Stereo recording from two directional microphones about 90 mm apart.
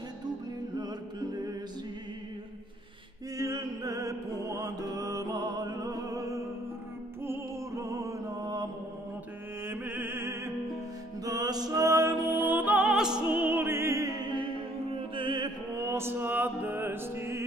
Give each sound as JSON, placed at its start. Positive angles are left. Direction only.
{"t": 0.7, "sound": "music", "side_deg": -50}
{"t": 3.3, "sound": "music", "side_deg": -40}
{"t": 9.7, "sound": "opera", "side_deg": -20}
{"t": 11.2, "sound": "music", "side_deg": -45}
{"t": 12.8, "sound": "music", "side_deg": -5}
{"t": 13.3, "sound": "opera", "side_deg": -20}
{"t": 15.1, "sound": "music", "side_deg": -60}
{"t": 15.7, "sound": "music", "side_deg": -30}